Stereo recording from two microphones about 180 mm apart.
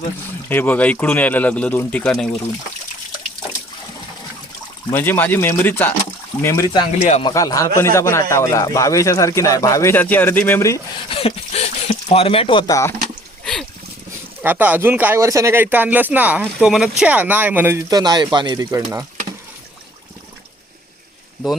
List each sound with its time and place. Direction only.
0.4 s speech: 10° left (ahead or behind)
4.9 s a man's voice: 10° left (ahead or behind)
11.1 s speech: 35° left (ahead or behind)
13.4 s a sound: 5° left (ahead or behind)
14.4 s speech: 10° right (ahead or behind)